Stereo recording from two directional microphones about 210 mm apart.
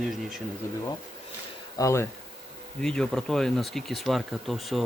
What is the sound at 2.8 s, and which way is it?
Speech, 5° left (ahead or behind).